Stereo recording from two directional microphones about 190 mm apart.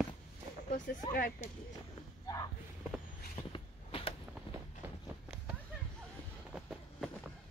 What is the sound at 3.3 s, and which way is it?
Vehicle, 25° left (ahead or behind).